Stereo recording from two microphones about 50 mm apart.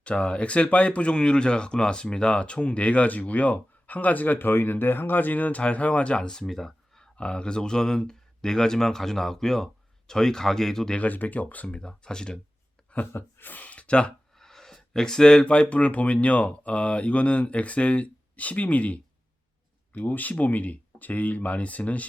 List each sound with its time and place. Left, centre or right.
0.0 s speech: left
6.2 s speech: centre
6.5 s a sound: centre
7.2 s speech: left
10.9 s speech: left
11.7 s speech: centre
13.1 s speech: left
14.3 s speech: centre; by 22.0 s left